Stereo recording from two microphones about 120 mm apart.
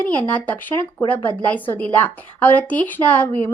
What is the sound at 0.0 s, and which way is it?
Speech, 10° left (ahead or behind).